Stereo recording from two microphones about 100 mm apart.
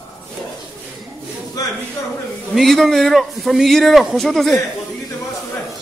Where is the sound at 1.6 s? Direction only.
40° left (ahead or behind).